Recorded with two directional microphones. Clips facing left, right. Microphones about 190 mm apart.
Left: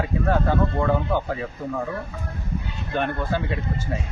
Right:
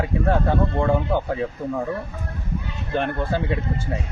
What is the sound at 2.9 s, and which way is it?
Speech, 25° right (ahead or behind).